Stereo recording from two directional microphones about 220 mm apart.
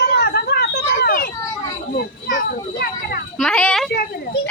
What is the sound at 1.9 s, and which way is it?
Children playing, 40° left (ahead or behind).